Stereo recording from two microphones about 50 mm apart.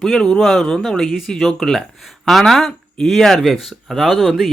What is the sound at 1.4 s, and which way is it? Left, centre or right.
Speech, centre.